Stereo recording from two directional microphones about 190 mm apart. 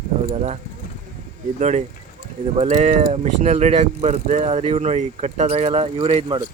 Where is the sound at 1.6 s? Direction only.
35° right (ahead or behind).